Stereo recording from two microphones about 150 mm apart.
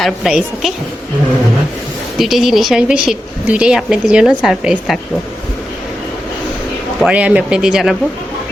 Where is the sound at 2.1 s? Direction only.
Centre (ahead or behind).